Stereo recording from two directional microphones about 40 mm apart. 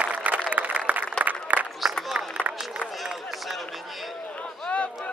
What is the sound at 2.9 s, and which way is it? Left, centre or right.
Run, centre.